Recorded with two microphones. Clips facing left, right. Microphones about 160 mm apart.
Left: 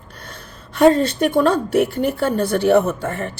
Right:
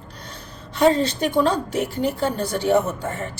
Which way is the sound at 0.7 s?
50° left (ahead or behind).